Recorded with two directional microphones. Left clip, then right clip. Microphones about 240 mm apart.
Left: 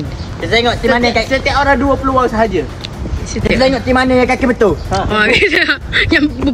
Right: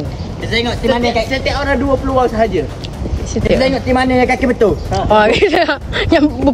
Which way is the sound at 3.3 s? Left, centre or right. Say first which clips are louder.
Left 1 dB; centre.